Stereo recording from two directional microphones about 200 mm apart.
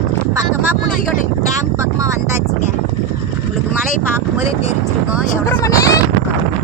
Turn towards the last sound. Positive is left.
turn(degrees=15)  # may be behind; listen again after turning